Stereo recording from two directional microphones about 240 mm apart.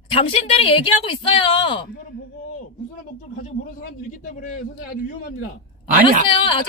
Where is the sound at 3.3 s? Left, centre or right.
Left.